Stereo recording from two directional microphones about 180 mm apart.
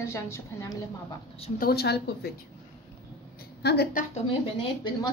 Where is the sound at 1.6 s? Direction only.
60° left (ahead or behind).